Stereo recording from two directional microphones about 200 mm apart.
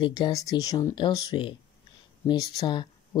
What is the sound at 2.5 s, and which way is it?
Speech, 25° left (ahead or behind).